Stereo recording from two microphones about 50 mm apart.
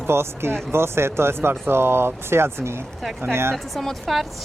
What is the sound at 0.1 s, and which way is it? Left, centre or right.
Speech, right.